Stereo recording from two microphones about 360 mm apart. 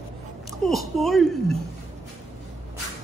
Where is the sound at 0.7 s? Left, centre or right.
Centre.